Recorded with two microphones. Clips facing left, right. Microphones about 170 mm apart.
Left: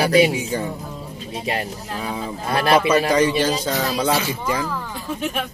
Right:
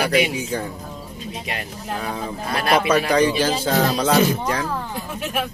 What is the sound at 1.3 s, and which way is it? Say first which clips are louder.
Speech: left 6 dB; 30° left (ahead or behind).